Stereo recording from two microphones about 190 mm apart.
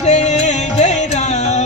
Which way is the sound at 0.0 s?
35° left (ahead or behind).